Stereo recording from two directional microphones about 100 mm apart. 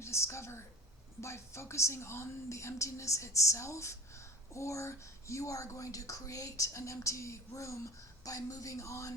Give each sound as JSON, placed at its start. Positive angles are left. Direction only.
{"t": 0.0, "sound": "a woman's voice", "side_deg": 30}